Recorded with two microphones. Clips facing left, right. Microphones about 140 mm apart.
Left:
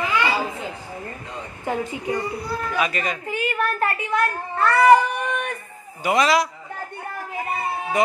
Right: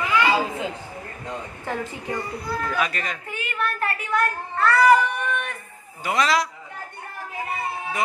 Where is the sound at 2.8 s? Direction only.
5° left (ahead or behind).